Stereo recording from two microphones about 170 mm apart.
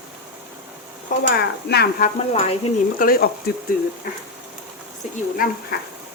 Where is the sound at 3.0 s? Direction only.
60° left (ahead or behind).